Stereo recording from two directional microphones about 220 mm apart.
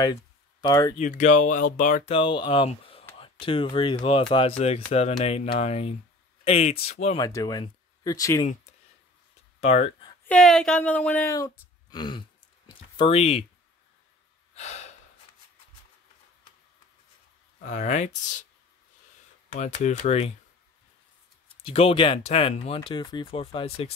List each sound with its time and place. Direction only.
0.0 s a sound: 15° left (ahead or behind)
0.9 s speech: 35° left (ahead or behind)
2.1 s speech: 20° left (ahead or behind)
7.2 s speech: 15° left (ahead or behind)
9.6 s speech: 30° left (ahead or behind)
10.2 s speech: 5° left (ahead or behind); by 13.5 s 30° left (ahead or behind)
14.5 s a sound: 30° left (ahead or behind)
17.6 s speech: 35° left (ahead or behind)
19.8 s speech: 30° left (ahead or behind)
21.6 s speech: 25° left (ahead or behind)